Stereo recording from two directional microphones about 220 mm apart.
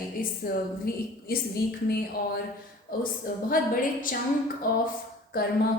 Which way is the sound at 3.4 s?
40° left (ahead or behind).